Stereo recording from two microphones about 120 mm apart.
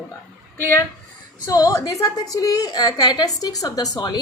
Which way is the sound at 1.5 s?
30° left (ahead or behind).